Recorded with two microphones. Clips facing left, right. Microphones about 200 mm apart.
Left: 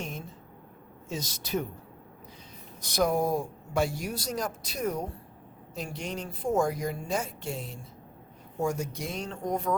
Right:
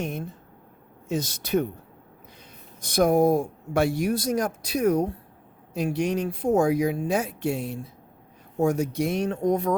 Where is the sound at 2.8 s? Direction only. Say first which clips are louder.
Right 7 dB; 55° right (ahead or behind).